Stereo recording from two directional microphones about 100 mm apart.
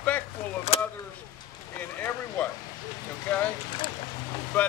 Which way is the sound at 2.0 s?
15° left (ahead or behind).